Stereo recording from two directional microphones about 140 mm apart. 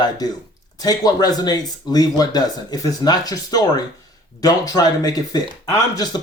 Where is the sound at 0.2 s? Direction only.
30° left (ahead or behind).